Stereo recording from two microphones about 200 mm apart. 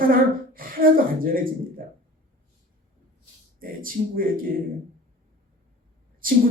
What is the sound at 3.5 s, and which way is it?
Speech, 45° right (ahead or behind).